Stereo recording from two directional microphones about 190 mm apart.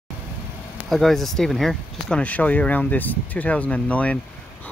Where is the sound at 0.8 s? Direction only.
Centre (ahead or behind).